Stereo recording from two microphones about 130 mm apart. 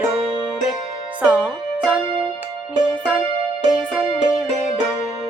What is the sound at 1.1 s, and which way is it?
Music, 10° right (ahead or behind).